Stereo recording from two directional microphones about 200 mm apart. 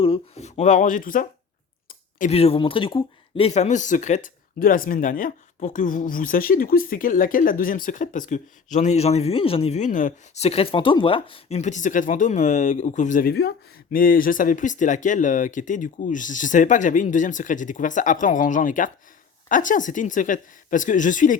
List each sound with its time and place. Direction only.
0.0 s speech: 30° left (ahead or behind)